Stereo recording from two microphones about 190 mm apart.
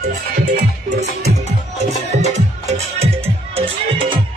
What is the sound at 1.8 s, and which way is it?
Music, 35° right (ahead or behind).